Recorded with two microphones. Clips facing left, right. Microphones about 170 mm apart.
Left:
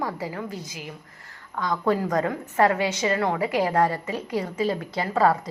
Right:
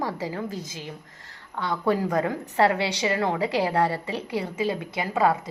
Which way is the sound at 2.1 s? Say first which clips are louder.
Left 1 dB; 25° right (ahead or behind).